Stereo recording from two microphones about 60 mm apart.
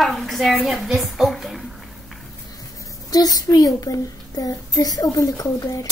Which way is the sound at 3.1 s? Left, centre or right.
Left.